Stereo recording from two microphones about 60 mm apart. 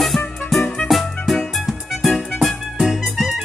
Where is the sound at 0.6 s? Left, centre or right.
Centre.